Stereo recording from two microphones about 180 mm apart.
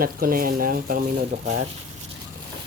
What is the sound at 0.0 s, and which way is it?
Speech, 55° right (ahead or behind).